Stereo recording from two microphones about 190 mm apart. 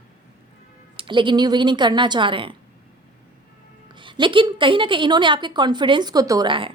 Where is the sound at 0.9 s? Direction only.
25° right (ahead or behind).